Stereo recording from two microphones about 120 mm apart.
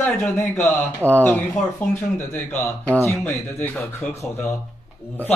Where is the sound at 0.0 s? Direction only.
10° left (ahead or behind).